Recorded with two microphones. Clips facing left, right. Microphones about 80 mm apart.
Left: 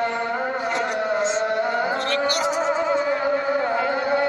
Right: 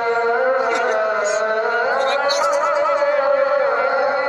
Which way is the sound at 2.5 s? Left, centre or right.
Right.